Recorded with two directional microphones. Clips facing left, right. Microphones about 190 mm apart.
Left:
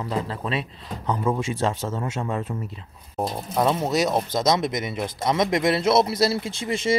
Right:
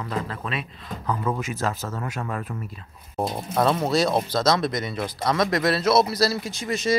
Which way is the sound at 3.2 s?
5° right (ahead or behind).